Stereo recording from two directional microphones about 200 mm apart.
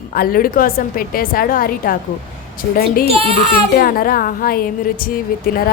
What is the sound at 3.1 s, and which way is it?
Speech, 30° right (ahead or behind).